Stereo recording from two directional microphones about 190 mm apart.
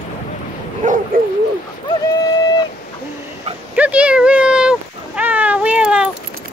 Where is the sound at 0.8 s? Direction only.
45° right (ahead or behind).